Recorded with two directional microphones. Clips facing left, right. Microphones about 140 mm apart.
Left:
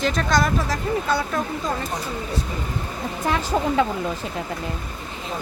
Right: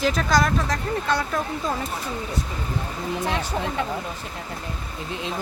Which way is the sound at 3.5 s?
90° left.